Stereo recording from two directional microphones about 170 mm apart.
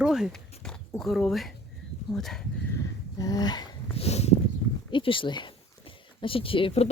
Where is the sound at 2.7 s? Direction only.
20° left (ahead or behind).